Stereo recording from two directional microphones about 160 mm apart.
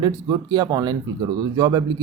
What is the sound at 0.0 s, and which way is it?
Speech, 25° right (ahead or behind).